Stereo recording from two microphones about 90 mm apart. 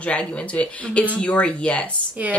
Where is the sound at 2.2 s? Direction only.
15° right (ahead or behind).